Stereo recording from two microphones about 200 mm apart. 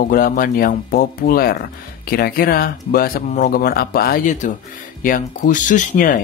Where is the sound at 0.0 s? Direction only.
45° left (ahead or behind).